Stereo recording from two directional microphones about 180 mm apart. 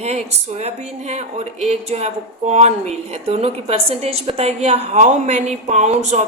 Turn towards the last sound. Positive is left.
turn(degrees=-40)  # may be behind; listen again after turning